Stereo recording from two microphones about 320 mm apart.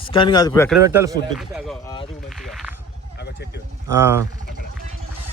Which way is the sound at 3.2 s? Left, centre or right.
Left.